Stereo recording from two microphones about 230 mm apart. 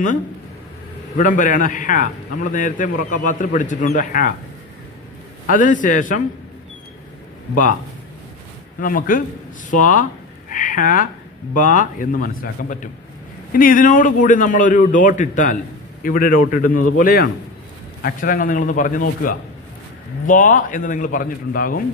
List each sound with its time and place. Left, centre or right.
1.1 s a man's voice: left
5.5 s a man's voice: left
8.8 s a man's voice: left
10.5 s a sound: left
11.5 s a man's voice: left